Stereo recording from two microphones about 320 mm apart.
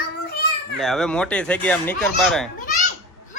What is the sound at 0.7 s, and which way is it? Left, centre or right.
Speech, centre.